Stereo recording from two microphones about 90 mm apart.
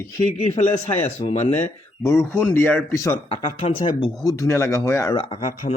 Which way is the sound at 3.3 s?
90° left.